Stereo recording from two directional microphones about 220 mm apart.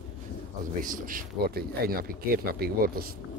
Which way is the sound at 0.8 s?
35° right (ahead or behind).